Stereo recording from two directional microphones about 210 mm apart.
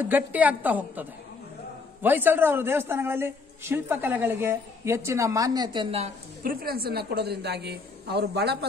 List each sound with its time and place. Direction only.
0.0 s speech: 10° right (ahead or behind)
2.0 s speech: 10° right (ahead or behind); by 6.5 s 30° right (ahead or behind)
6.6 s a woman's voice: 45° right (ahead or behind)